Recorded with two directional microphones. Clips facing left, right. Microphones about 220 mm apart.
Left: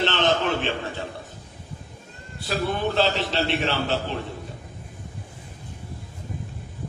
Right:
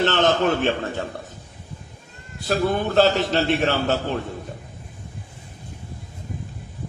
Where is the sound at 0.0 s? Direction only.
45° right (ahead or behind).